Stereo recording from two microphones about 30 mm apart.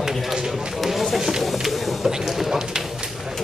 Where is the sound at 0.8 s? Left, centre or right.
Centre.